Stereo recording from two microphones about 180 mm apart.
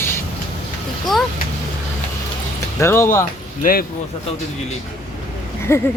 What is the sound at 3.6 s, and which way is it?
Speech, 55° left (ahead or behind).